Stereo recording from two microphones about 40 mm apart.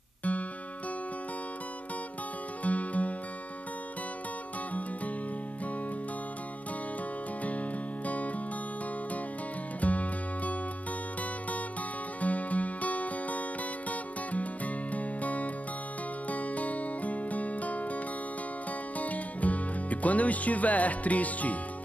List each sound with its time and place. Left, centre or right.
0.2 s music: left
2.6 s music: left
8.1 s music: left
9.8 s music: left
12.2 s music: left